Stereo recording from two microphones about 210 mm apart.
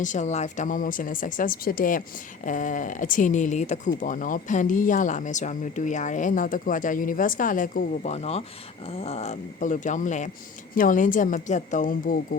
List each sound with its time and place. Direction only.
0.0 s speech: 35° left (ahead or behind)